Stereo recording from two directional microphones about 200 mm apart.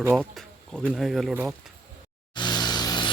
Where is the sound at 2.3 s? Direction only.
20° left (ahead or behind).